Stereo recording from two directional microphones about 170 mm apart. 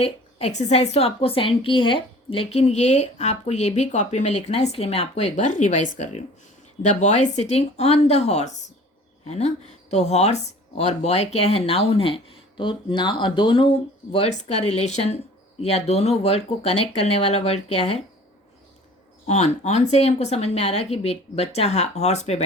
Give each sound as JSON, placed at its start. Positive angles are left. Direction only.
{"t": 0.0, "sound": "a woman's voice", "side_deg": 40}
{"t": 19.3, "sound": "a woman's voice", "side_deg": 40}